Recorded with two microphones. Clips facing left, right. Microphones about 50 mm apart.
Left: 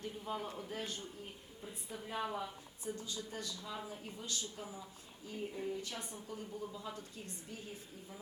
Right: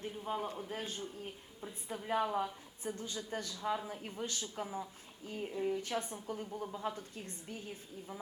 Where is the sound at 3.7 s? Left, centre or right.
Right.